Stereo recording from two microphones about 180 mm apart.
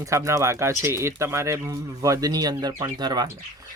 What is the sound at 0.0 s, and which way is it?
Speech, 15° right (ahead or behind).